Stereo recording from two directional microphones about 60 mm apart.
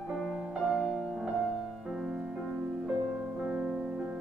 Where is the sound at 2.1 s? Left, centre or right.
Centre.